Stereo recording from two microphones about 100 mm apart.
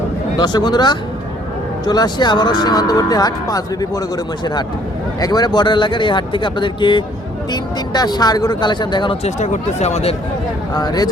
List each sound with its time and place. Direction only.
0.3 s speech: 45° left (ahead or behind)
5.2 s speech: 40° left (ahead or behind)
9.8 s speech: 90° left
10.8 s speech: 40° left (ahead or behind)